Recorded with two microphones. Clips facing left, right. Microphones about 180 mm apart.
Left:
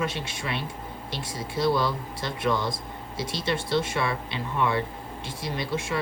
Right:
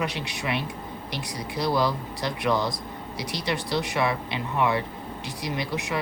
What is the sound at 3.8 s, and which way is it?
Speech, 20° right (ahead or behind).